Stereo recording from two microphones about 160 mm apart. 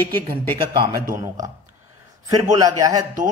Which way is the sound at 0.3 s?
30° right (ahead or behind).